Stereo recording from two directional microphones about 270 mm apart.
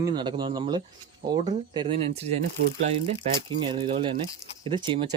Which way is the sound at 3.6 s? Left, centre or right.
Centre.